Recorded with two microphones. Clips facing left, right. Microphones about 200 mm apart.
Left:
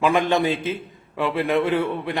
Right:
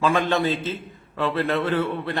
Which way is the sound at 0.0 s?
15° left (ahead or behind).